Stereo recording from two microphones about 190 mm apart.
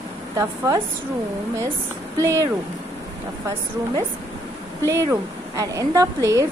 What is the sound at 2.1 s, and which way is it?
Speech, 15° right (ahead or behind).